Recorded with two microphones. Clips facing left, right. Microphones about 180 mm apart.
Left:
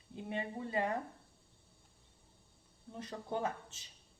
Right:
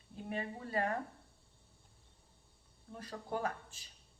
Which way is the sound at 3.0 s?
20° left (ahead or behind).